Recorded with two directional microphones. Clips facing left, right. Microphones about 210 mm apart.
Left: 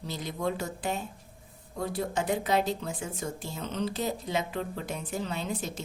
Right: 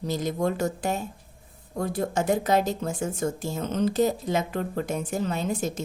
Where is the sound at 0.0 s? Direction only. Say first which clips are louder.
Right 6 dB; 45° right (ahead or behind).